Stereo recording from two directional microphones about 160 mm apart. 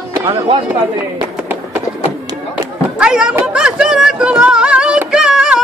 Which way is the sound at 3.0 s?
5° right (ahead or behind).